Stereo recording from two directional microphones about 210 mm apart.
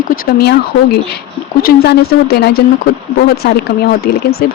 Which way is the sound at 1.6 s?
50° left (ahead or behind).